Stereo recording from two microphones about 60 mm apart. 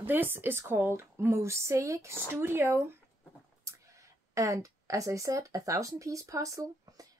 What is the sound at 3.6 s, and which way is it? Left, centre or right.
Speech, right.